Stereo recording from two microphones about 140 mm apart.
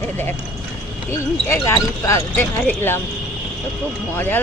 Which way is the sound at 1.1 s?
20° left (ahead or behind).